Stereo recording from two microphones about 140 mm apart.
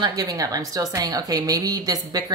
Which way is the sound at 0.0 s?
25° right (ahead or behind).